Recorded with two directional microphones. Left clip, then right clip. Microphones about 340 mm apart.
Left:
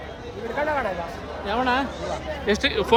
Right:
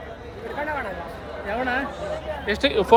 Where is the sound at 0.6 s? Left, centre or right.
Left.